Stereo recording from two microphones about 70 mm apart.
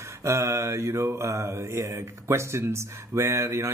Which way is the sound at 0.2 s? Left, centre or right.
Right.